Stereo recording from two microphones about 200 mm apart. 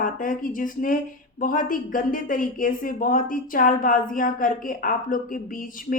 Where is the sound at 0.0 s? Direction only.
45° left (ahead or behind).